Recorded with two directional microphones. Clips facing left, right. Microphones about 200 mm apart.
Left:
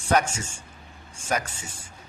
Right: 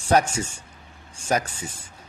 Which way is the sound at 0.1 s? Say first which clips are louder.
Right 3 dB; 35° right (ahead or behind).